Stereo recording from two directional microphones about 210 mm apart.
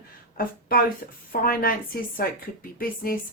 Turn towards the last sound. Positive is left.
turn(degrees=45)  # may be behind; listen again after turning